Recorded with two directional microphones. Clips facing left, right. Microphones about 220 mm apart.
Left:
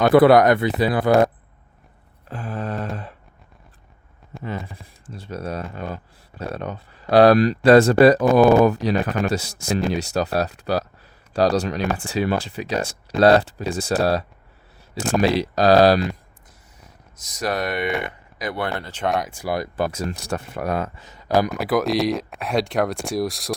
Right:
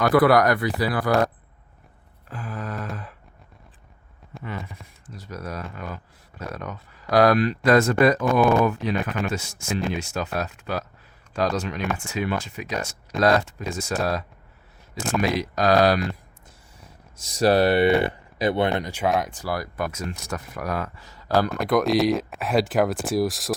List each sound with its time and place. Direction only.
0.0 s speech: 25° left (ahead or behind)
2.3 s speech: 30° left (ahead or behind)
2.9 s a sound: 30° left (ahead or behind)
4.4 s speech: 30° left (ahead or behind)
17.2 s speech: 30° right (ahead or behind); by 19.4 s centre (ahead or behind)
19.4 s speech: 20° left (ahead or behind)
19.7 s speech: 30° left (ahead or behind); by 21.5 s 15° left (ahead or behind)
21.5 s speech: centre (ahead or behind)